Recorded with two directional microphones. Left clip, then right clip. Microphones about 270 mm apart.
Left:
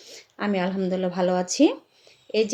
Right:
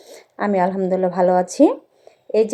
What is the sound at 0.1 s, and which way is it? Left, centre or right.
Speech, centre.